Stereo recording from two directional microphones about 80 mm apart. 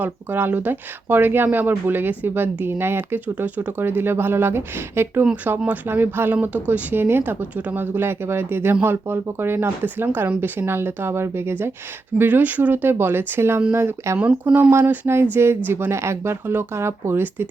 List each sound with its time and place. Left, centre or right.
0.0 s speech: right
14.2 s speech: centre
14.7 s speech: right